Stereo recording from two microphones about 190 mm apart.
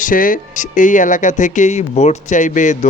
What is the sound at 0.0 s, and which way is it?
A man's voice, 45° left (ahead or behind).